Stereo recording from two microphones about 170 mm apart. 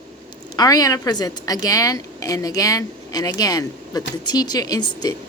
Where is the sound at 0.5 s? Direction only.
20° left (ahead or behind).